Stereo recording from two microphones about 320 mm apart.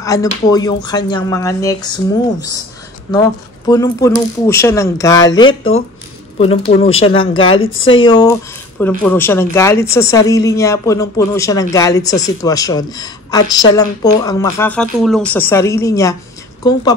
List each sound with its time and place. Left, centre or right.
0.0 s speech: centre
3.1 s speech: centre
5.5 s speech: left
6.3 s speech: centre
7.6 s speech: left
8.0 s speech: centre